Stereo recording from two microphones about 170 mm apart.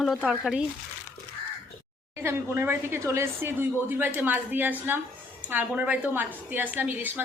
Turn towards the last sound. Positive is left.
turn(degrees=-10)  # may be behind; listen again after turning